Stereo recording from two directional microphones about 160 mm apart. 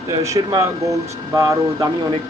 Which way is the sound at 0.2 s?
20° right (ahead or behind).